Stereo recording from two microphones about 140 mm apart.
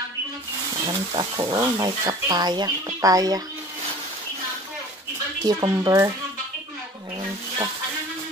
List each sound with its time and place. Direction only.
0.8 s speech: 30° right (ahead or behind)
5.4 s speech: 25° right (ahead or behind)